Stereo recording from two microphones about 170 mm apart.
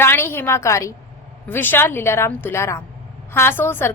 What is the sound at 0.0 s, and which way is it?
A woman's voice, 15° left (ahead or behind).